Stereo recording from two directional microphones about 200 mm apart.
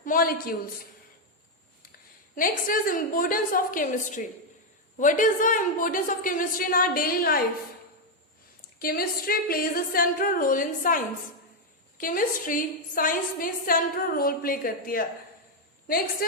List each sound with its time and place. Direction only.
0.0 s a woman's voice: 45° left (ahead or behind)
2.3 s a woman's voice: 45° left (ahead or behind)
8.8 s a woman's voice: 45° left (ahead or behind)